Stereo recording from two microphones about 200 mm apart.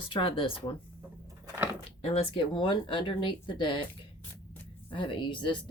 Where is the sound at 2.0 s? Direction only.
30° left (ahead or behind).